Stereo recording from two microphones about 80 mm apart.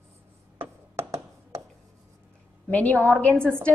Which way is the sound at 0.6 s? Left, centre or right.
Right.